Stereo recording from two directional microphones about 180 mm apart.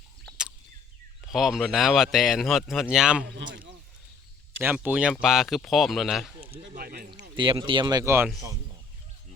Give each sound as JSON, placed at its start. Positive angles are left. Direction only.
{"t": 0.3, "sound": "a sound", "side_deg": -5}
{"t": 1.2, "sound": "speech", "side_deg": 0}
{"t": 3.2, "sound": "speech", "side_deg": -75}
{"t": 4.6, "sound": "speech", "side_deg": -10}
{"t": 6.7, "sound": "speech", "side_deg": -55}
{"t": 7.3, "sound": "speech", "side_deg": -25}